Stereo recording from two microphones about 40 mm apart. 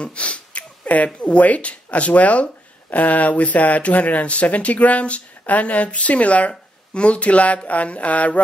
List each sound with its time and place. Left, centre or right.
0.0 s speech: left